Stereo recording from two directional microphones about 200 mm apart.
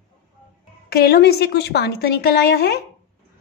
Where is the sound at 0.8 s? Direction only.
50° left (ahead or behind).